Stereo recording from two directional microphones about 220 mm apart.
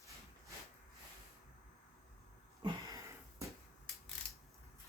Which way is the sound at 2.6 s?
15° right (ahead or behind).